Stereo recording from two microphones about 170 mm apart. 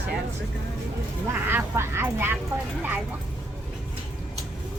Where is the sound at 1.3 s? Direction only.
15° right (ahead or behind).